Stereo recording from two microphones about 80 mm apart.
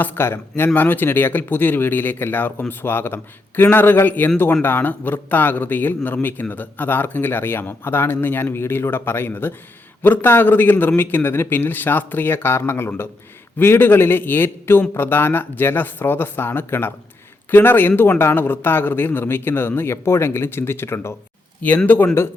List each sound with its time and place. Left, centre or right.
0.0 s speech: left